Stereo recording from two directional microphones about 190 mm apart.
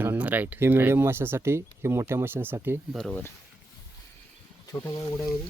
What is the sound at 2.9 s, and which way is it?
Speech, 5° left (ahead or behind).